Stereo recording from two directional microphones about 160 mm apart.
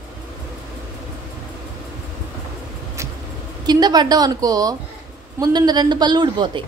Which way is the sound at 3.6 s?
25° right (ahead or behind).